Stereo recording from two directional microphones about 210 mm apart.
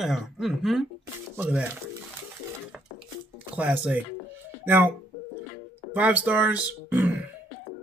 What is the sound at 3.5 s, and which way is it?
Speech, 10° right (ahead or behind).